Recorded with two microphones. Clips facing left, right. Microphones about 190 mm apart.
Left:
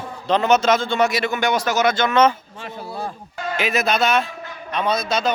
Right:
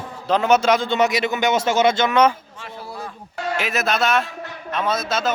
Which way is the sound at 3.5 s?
Centre (ahead or behind).